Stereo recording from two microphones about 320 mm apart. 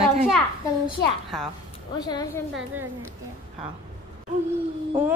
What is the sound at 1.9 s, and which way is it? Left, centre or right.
Speech, centre.